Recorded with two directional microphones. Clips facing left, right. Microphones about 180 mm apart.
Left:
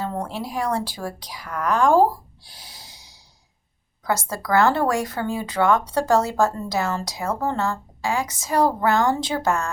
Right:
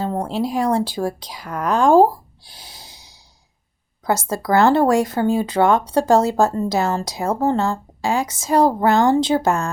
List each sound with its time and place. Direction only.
0.0 s speech: 25° right (ahead or behind)
2.6 s snort: 25° right (ahead or behind)
4.0 s speech: 25° right (ahead or behind)